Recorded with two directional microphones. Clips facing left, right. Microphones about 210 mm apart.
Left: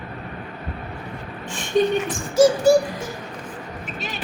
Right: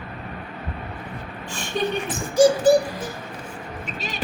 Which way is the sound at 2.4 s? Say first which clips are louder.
Left 1 dB; centre (ahead or behind).